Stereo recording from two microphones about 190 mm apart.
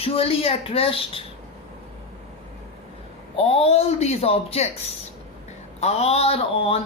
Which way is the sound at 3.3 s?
30° left (ahead or behind).